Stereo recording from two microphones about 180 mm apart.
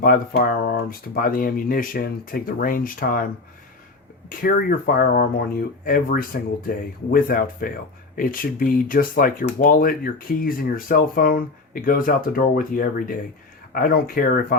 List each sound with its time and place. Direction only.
0.0 s speech: 55° left (ahead or behind)
4.3 s speech: 50° left (ahead or behind)